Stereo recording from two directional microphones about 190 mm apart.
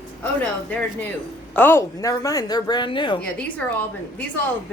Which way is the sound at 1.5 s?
10° left (ahead or behind).